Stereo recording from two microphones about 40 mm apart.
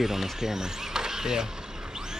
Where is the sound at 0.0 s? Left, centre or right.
Centre.